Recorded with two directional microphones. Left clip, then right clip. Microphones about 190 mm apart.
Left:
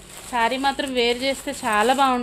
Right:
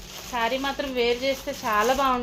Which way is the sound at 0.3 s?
75° left (ahead or behind).